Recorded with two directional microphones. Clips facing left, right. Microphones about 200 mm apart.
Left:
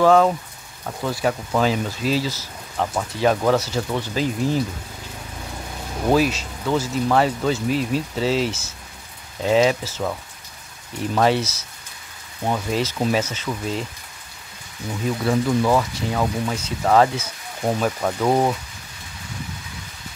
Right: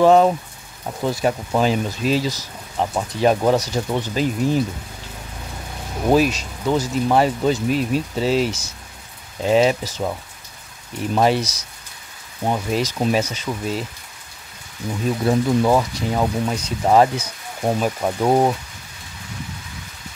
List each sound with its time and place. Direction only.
0.0 s speech: 20° right (ahead or behind)
6.0 s speech: 15° right (ahead or behind)
11.1 s speech: 15° right (ahead or behind)
15.0 s speech: 20° right (ahead or behind)